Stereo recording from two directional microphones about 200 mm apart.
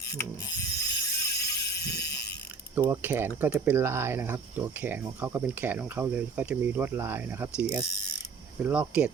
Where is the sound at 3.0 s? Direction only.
10° right (ahead or behind).